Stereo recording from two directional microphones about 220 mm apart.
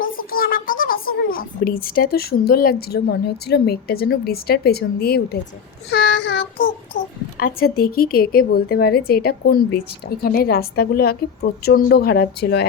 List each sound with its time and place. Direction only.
0.0 s a child's voice: 40° left (ahead or behind)